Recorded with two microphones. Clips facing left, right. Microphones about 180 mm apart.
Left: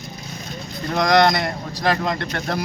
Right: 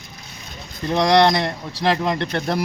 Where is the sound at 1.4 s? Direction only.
25° right (ahead or behind).